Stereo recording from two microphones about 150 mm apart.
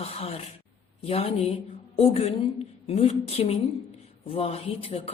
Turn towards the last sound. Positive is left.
turn(degrees=40)  # may be behind; listen again after turning